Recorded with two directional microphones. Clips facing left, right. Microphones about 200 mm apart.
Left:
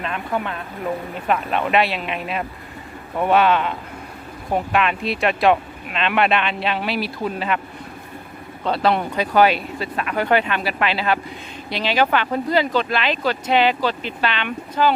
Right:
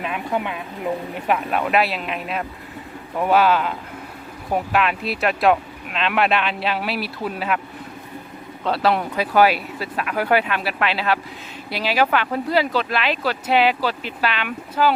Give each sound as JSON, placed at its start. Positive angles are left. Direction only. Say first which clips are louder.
{"t": 0.0, "sound": "speech", "louder": "right 1 dB", "side_deg": -10}
{"t": 8.6, "sound": "speech", "louder": "left 1 dB", "side_deg": 0}